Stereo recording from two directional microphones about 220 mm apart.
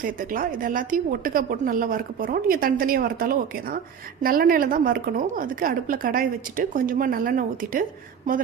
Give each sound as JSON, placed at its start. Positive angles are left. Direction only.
{"t": 0.0, "sound": "a woman's voice", "side_deg": -40}